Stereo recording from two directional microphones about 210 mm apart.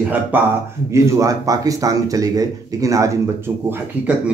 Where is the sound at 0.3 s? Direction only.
10° right (ahead or behind).